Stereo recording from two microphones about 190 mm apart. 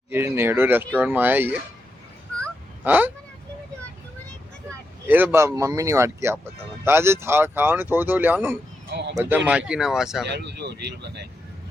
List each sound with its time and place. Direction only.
0.1 s speech: 10° right (ahead or behind)
2.8 s speech: 10° right (ahead or behind)
5.0 s speech: 10° right (ahead or behind)
8.9 s a sound: 65° right (ahead or behind)
9.5 s speech: 5° right (ahead or behind)
10.2 s speech: 65° right (ahead or behind)